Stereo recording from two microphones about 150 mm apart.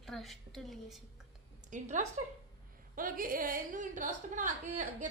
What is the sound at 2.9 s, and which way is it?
A woman's voice, 65° right (ahead or behind).